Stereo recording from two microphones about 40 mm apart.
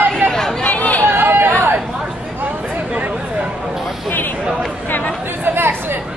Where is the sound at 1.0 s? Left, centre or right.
Right.